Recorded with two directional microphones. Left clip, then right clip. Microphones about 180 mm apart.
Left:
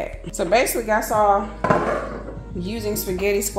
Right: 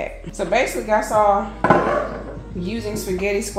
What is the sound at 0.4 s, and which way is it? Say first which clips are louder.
Speech: left 1 dB; 65° left (ahead or behind).